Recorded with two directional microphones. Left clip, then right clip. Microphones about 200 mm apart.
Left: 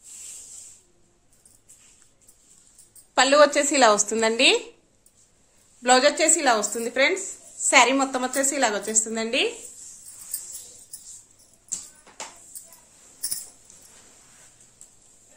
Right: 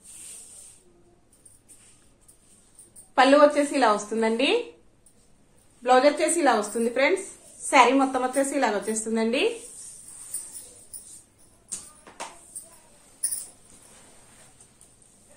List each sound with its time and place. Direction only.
3.2 s a woman's voice: 60° left (ahead or behind)
5.8 s a woman's voice: 55° left (ahead or behind); by 7.2 s 35° left (ahead or behind)
7.7 s a woman's voice: 50° left (ahead or behind)